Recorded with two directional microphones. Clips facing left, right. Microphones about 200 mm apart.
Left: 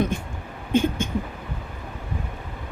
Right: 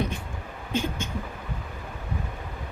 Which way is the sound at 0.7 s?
55° left (ahead or behind).